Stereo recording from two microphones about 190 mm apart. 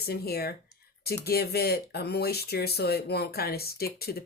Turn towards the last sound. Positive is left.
turn(degrees=55)  # may be behind; listen again after turning